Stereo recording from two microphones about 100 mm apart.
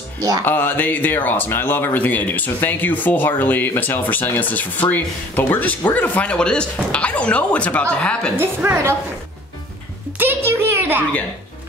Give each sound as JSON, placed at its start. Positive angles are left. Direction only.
{"t": 0.5, "sound": "speech", "side_deg": 20}
{"t": 8.4, "sound": "a woman's voice", "side_deg": -25}
{"t": 10.1, "sound": "a child's voice", "side_deg": -20}